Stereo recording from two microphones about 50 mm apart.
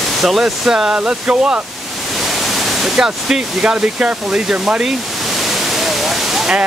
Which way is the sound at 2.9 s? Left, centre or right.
Centre.